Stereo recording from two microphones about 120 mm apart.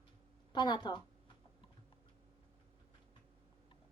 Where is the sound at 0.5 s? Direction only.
40° left (ahead or behind).